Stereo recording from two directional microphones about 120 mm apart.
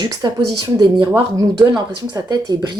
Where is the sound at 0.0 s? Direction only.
35° right (ahead or behind).